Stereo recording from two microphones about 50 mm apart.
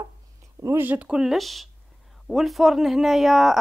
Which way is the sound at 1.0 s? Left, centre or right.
Centre.